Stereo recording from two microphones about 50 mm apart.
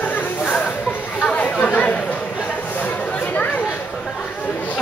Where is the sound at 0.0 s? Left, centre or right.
Left.